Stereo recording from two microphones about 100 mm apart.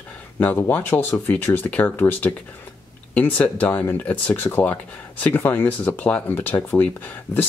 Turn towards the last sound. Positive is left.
turn(degrees=15)  # may be behind; listen again after turning